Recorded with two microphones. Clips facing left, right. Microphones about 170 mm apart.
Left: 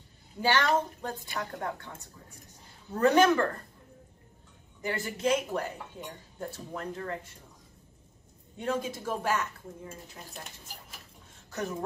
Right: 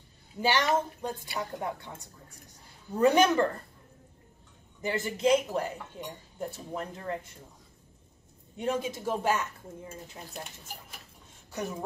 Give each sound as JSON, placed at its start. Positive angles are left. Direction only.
{"t": 0.4, "sound": "a woman's voice", "side_deg": -15}
{"t": 4.8, "sound": "speech", "side_deg": -20}
{"t": 8.5, "sound": "a woman's voice", "side_deg": -15}